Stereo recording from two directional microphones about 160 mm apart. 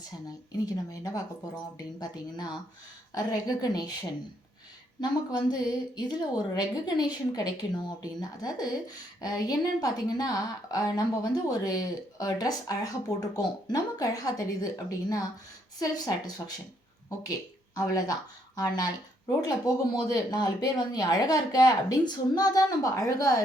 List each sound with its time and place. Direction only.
0.3 s a woman's voice: 20° left (ahead or behind)
4.9 s a woman's voice: 25° left (ahead or behind)
17.7 s a woman's voice: 25° left (ahead or behind)